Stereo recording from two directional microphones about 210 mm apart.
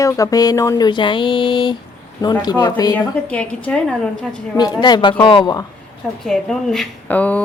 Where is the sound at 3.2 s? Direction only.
5° left (ahead or behind).